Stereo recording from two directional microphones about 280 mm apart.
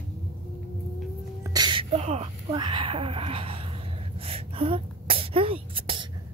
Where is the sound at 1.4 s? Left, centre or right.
Centre.